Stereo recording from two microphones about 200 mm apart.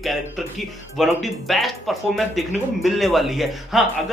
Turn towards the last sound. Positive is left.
turn(degrees=0)  # may be behind; listen again after turning